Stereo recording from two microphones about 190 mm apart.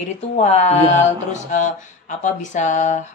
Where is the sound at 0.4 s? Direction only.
35° left (ahead or behind).